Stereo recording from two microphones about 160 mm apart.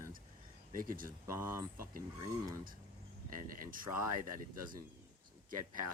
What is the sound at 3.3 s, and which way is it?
Speech, 60° right (ahead or behind).